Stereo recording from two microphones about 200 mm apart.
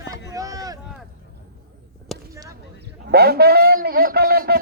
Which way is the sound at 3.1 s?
50° right (ahead or behind).